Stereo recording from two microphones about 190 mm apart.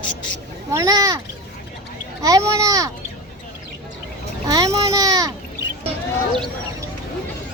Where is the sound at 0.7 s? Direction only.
15° right (ahead or behind).